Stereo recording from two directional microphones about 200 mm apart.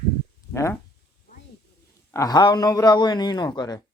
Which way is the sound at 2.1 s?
20° left (ahead or behind).